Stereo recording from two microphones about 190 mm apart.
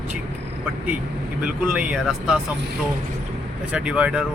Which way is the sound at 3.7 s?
5° right (ahead or behind).